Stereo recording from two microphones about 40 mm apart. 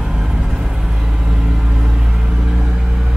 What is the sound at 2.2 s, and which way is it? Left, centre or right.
Vehicle, right.